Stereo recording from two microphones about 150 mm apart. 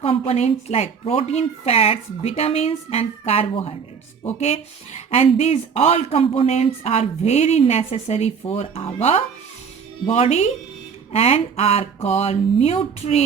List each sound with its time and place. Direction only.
0.0 s speech: 40° left (ahead or behind)